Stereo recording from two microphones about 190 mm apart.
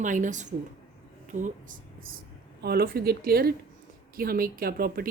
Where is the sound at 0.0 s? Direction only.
40° right (ahead or behind).